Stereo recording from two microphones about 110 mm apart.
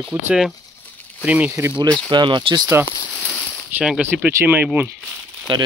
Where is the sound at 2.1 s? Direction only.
45° right (ahead or behind).